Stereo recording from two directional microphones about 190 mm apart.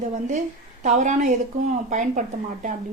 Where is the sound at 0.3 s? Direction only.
40° right (ahead or behind).